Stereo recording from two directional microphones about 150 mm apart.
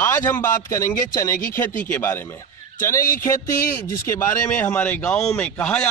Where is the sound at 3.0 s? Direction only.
65° left (ahead or behind).